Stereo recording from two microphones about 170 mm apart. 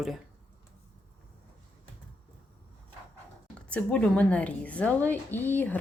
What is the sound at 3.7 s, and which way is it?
A woman's voice, 5° left (ahead or behind).